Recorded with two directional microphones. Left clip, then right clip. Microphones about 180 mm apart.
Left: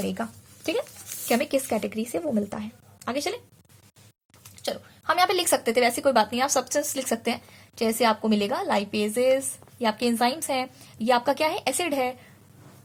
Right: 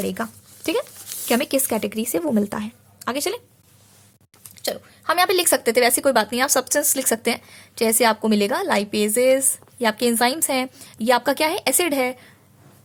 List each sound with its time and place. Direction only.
0.0 s speech: 35° right (ahead or behind)
4.4 s speech: 40° right (ahead or behind)